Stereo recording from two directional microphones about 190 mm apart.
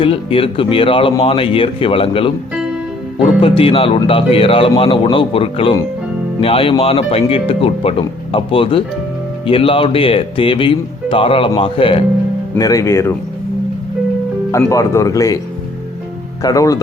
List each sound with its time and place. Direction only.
0.0 s speech: 30° left (ahead or behind)
3.4 s speech: 30° left (ahead or behind)
12.5 s speech: 20° left (ahead or behind)
14.7 s speech: 15° left (ahead or behind)
16.4 s speech: 20° left (ahead or behind)